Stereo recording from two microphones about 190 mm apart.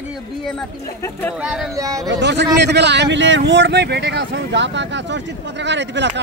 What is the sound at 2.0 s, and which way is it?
A man's voice, 65° right (ahead or behind).